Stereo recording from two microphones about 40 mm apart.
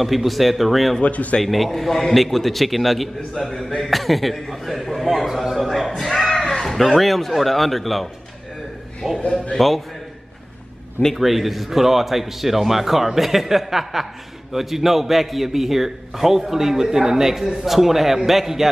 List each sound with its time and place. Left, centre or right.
0.0 s a man's voice: centre
1.0 s speech: left
1.4 s a man's voice: centre
5.7 s a sound: centre
6.7 s a man's voice: centre
9.0 s a man's voice: centre
9.6 s a man's voice: centre
11.1 s a man's voice: centre